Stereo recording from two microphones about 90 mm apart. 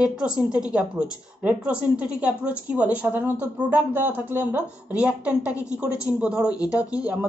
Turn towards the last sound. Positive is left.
turn(degrees=-15)  # may be behind; listen again after turning